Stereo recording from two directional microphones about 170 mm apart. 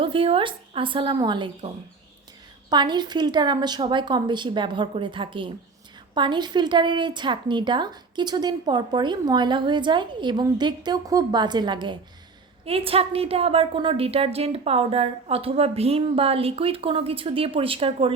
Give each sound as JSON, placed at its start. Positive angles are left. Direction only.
{"t": 0.0, "sound": "a woman's voice", "side_deg": -30}